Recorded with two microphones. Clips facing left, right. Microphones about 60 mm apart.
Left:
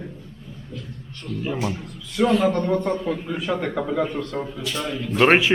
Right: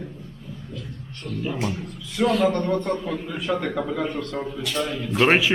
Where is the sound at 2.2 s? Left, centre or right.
Centre.